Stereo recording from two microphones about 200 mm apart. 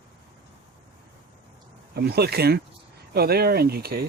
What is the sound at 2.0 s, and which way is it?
Speech, 55° right (ahead or behind).